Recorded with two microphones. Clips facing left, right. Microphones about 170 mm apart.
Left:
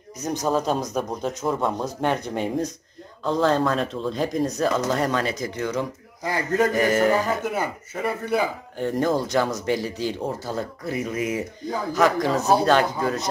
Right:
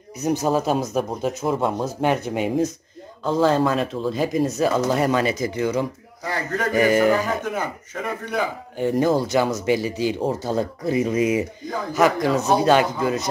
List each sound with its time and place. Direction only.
0.2 s speech: 10° right (ahead or behind)
7.1 s speech: 10° left (ahead or behind)
8.7 s speech: 5° right (ahead or behind)
10.2 s speech: 20° right (ahead or behind)
11.9 s speech: 5° right (ahead or behind)